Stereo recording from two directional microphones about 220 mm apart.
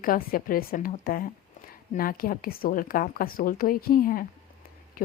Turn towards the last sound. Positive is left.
turn(degrees=40)  # may be behind; listen again after turning